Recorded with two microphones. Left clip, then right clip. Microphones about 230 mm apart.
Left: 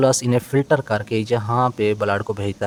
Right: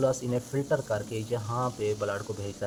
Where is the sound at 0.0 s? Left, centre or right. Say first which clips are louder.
Left 10 dB; left.